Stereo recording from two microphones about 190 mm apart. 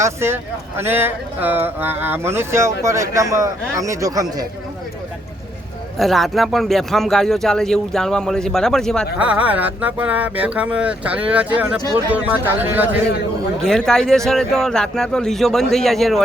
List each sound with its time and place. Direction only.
0.0 s speech: 15° right (ahead or behind)
6.0 s speech: centre (ahead or behind)
13.6 s speech: 5° left (ahead or behind)